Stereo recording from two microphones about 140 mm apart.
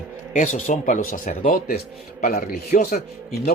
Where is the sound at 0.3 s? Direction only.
60° left (ahead or behind).